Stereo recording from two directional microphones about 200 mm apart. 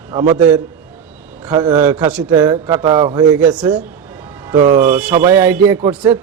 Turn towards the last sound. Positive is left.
turn(degrees=-10)  # may be behind; listen again after turning